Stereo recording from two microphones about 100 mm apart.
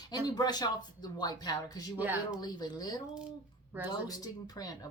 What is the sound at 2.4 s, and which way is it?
Speech, 40° left (ahead or behind).